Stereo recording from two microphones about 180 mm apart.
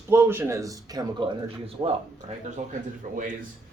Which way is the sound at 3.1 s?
45° right (ahead or behind).